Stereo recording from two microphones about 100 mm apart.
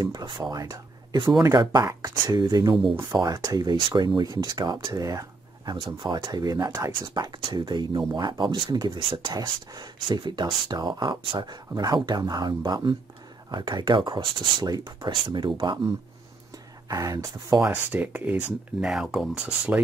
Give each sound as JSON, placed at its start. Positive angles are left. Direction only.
{"t": 0.0, "sound": "speech", "side_deg": -45}
{"t": 5.7, "sound": "speech", "side_deg": -45}
{"t": 6.9, "sound": "speech", "side_deg": -45}
{"t": 15.2, "sound": "speech", "side_deg": -55}
{"t": 16.9, "sound": "speech", "side_deg": -35}
{"t": 17.6, "sound": "speech", "side_deg": -20}